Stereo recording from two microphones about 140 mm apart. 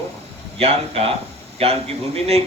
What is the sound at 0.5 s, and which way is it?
A man's voice, 45° right (ahead or behind).